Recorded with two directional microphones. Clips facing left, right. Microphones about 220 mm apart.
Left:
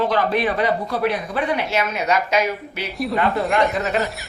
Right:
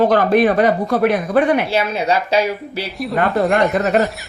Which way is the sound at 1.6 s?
30° right (ahead or behind).